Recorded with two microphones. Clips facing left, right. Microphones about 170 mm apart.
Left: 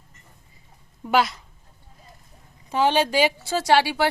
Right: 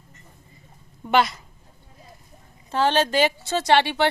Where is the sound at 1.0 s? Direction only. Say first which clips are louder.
Right 1 dB; centre (ahead or behind).